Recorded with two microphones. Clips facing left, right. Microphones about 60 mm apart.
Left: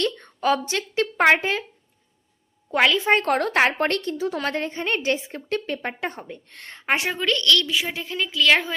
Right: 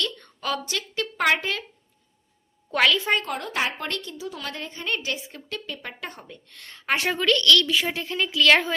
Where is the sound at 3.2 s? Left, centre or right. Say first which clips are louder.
Left 8 dB; left.